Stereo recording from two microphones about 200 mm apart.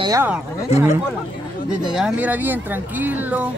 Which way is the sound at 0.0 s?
15° right (ahead or behind).